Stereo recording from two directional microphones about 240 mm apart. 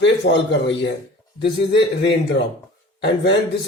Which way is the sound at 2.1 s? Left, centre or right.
Left.